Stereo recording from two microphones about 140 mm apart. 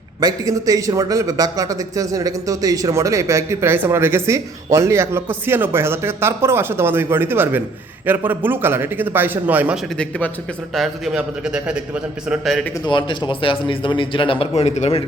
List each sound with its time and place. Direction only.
0.2 s a man's voice: 25° right (ahead or behind)
10.8 s a man's voice: 5° right (ahead or behind)
12.8 s a man's voice: 35° left (ahead or behind); by 15.0 s 50° left (ahead or behind)